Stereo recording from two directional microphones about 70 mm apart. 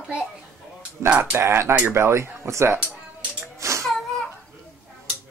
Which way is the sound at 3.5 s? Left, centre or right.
Right.